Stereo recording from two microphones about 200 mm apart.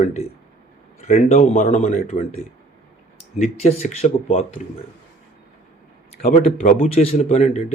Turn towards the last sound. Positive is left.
turn(degrees=35)  # may be behind; listen again after turning